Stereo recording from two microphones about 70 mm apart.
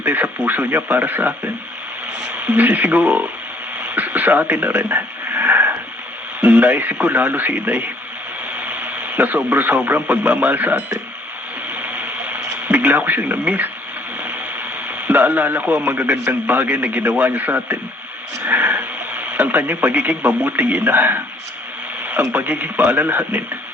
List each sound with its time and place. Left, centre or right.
0.0 s a man's voice: right
2.4 s a man's voice: right
11.8 s radio: right
15.0 s a man's voice: right